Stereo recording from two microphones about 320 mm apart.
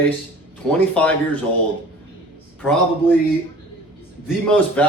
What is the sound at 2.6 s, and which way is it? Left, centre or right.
Speech, centre.